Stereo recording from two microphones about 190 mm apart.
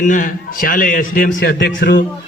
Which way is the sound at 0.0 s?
45° left (ahead or behind).